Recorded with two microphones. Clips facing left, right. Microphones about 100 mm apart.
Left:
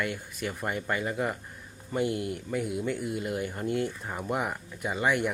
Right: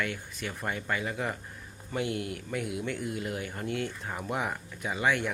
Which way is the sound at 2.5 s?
Centre (ahead or behind).